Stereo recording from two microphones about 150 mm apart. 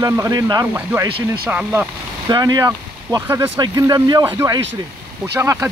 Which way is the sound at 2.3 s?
25° right (ahead or behind).